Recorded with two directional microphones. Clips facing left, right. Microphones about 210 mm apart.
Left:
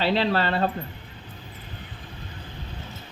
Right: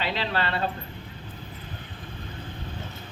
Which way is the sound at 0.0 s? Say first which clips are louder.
Left 6 dB; 35° left (ahead or behind).